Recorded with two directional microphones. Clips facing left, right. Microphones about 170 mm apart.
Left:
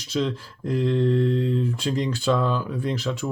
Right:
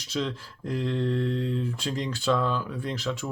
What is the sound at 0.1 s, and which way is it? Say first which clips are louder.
Speech: left 5 dB; centre (ahead or behind).